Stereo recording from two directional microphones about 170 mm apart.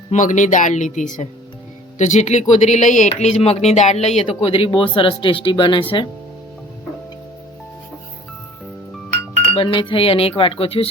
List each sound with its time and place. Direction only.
0.1 s speech: 45° left (ahead or behind); by 5.8 s 30° left (ahead or behind)
9.5 s speech: 30° left (ahead or behind)